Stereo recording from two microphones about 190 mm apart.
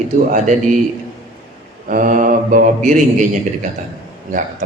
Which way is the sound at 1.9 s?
45° right (ahead or behind).